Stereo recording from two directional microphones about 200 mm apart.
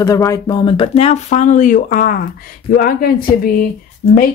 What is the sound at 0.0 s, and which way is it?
Speech, 15° left (ahead or behind).